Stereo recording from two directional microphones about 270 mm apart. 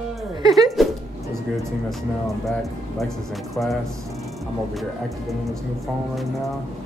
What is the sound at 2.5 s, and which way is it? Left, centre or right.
Speech, centre.